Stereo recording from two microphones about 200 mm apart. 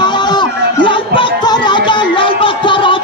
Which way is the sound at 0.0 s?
20° left (ahead or behind).